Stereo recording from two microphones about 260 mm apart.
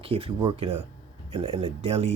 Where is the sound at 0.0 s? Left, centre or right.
Right.